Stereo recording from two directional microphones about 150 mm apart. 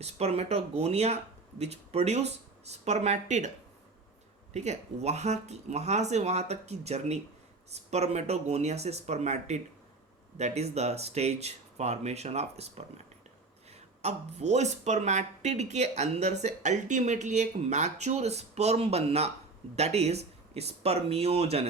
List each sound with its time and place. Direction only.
0.0 s speech: 45° right (ahead or behind)
4.5 s speech: 50° right (ahead or behind)